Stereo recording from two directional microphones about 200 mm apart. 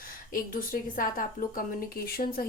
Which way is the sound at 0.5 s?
45° left (ahead or behind).